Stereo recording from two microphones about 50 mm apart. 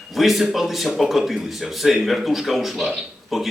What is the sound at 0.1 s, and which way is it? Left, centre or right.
Speech, centre.